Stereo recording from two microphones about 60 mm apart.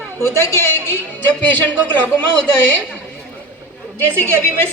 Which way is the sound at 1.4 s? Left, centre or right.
Left.